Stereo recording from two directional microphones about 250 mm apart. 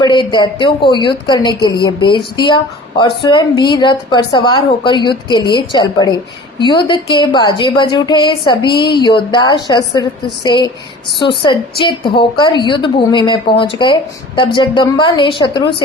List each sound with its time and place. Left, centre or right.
0.0 s a woman's voice: centre